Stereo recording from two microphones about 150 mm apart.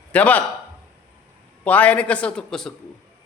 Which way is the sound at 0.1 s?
10° left (ahead or behind).